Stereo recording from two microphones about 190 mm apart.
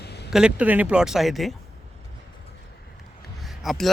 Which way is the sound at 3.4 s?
Centre (ahead or behind).